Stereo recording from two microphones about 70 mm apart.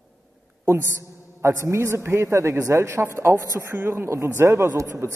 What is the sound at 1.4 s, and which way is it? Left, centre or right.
A woman's voice, right.